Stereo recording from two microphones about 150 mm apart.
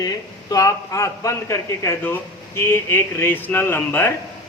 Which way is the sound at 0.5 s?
20° left (ahead or behind).